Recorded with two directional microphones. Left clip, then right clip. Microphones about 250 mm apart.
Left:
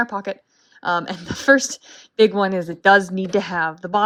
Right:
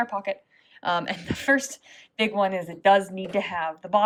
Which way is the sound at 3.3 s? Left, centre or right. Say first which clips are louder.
Left 6 dB; left.